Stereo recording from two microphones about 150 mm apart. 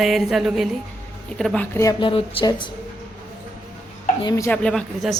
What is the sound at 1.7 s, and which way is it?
Speech, 20° left (ahead or behind).